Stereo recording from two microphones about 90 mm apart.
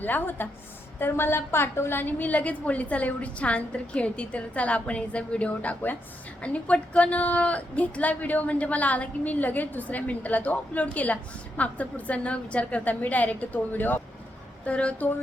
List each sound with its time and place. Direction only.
0.0 s a woman's voice: 20° left (ahead or behind)